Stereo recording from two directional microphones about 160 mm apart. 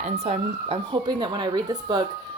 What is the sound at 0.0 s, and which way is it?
Speech, 40° right (ahead or behind).